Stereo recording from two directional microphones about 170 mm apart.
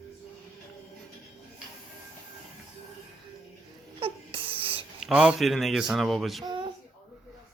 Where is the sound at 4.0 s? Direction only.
35° right (ahead or behind).